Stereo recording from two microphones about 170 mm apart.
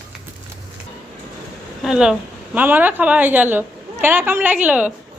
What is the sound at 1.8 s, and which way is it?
A woman's voice, 5° right (ahead or behind).